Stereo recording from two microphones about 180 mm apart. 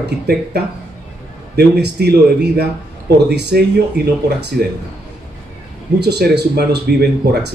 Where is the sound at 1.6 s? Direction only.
65° right (ahead or behind).